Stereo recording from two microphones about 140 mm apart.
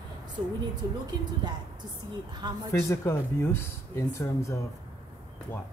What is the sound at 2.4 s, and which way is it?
Speech, 30° right (ahead or behind).